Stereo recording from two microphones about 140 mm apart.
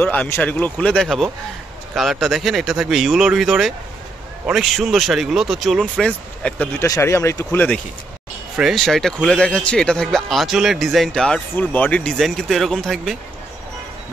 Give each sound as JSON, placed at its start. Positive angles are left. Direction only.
{"t": 0.0, "sound": "speech", "side_deg": 15}
{"t": 6.8, "sound": "speech", "side_deg": 20}
{"t": 8.5, "sound": "speech", "side_deg": 0}